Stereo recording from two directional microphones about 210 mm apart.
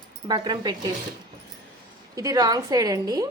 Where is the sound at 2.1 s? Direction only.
15° right (ahead or behind).